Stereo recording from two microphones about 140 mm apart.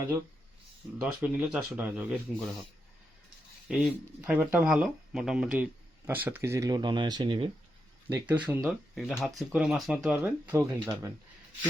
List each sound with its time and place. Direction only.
0.9 s speech: 5° right (ahead or behind)
4.2 s speech: 10° right (ahead or behind); by 7.5 s 40° right (ahead or behind)
8.1 s speech: 10° right (ahead or behind)
8.6 s speech: centre (ahead or behind)
10.5 s speech: 20° right (ahead or behind)